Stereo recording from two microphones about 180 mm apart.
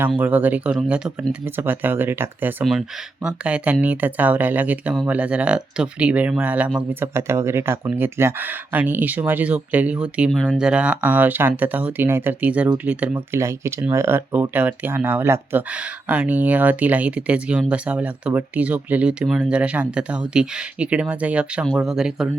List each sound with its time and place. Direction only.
0.1 s speech: 10° right (ahead or behind)